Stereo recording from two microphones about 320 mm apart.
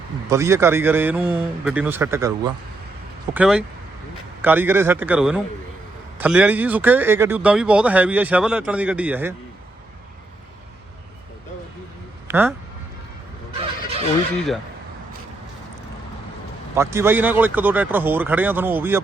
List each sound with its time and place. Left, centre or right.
0.3 s speech: centre
12.3 s speech: centre
13.5 s fowl: centre
16.7 s speech: centre